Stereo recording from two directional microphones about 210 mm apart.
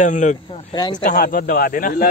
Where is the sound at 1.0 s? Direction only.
40° left (ahead or behind).